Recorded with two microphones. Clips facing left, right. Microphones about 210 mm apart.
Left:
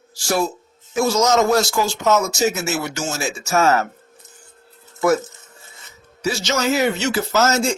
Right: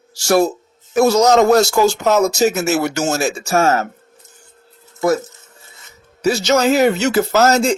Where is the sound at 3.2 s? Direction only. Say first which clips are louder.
Right 3 dB; 40° right (ahead or behind).